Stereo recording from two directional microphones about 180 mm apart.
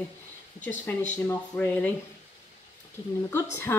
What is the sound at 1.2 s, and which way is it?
Speech, 10° left (ahead or behind).